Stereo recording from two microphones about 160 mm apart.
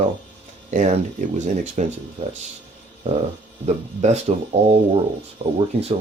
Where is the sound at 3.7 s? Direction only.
45° right (ahead or behind).